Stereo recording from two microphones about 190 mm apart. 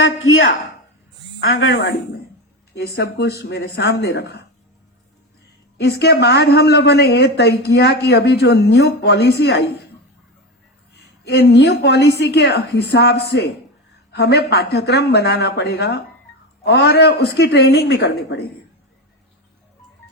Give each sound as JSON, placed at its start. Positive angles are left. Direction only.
{"t": 0.0, "sound": "speech", "side_deg": 90}
{"t": 2.7, "sound": "a woman's voice", "side_deg": 60}
{"t": 5.7, "sound": "a woman's voice", "side_deg": 60}
{"t": 10.9, "sound": "a woman's voice", "side_deg": 60}